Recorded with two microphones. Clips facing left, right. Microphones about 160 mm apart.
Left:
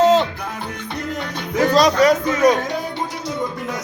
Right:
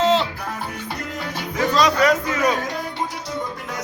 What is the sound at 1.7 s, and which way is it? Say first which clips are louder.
Speech: left 3 dB; 35° left (ahead or behind).